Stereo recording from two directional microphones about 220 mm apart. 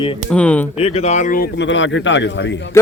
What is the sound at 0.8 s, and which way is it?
Speech, 30° left (ahead or behind).